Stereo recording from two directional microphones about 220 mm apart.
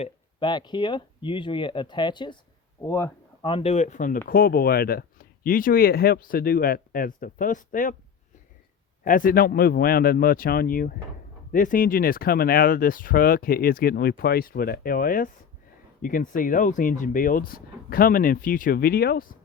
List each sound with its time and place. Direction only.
0.0 s speech: 20° left (ahead or behind)
3.5 s speech: 25° left (ahead or behind)
9.0 s a man's voice: 40° left (ahead or behind)